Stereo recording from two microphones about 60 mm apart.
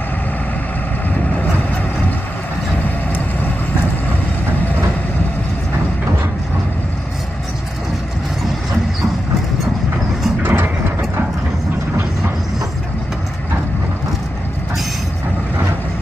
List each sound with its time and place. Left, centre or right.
10.4 s mechanisms: right